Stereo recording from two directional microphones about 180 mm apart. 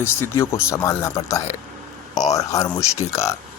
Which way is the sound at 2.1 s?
40° left (ahead or behind).